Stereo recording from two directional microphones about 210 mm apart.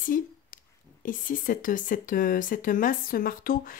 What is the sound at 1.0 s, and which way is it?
Speech, 40° left (ahead or behind).